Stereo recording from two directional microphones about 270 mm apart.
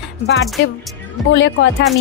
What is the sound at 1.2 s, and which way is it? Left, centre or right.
Speech, left.